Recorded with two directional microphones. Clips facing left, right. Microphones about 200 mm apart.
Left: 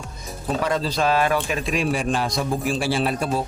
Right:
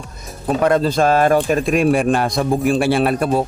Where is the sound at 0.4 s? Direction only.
55° right (ahead or behind).